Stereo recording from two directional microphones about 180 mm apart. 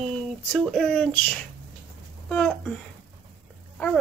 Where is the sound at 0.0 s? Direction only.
Centre (ahead or behind).